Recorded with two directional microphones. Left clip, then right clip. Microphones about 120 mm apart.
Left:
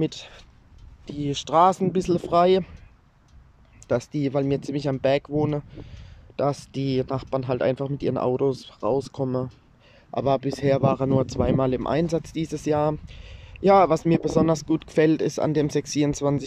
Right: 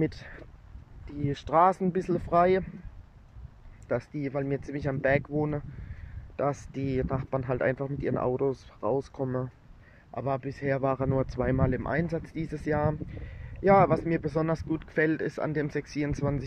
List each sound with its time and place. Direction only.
0.0 s speech: 5° left (ahead or behind)
3.8 s speech: 20° left (ahead or behind)
4.6 s speech: 15° left (ahead or behind)
10.1 s speech: 35° left (ahead or behind)
10.8 s speech: 20° left (ahead or behind)